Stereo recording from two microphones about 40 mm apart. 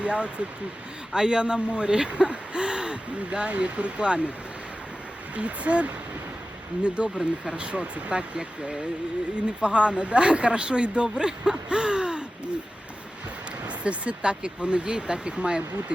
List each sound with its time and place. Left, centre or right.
0.0 s speech: right
5.3 s speech: right
13.6 s speech: right